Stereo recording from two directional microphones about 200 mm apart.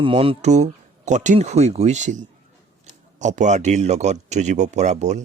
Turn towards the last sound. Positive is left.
turn(degrees=-35)  # may be behind; listen again after turning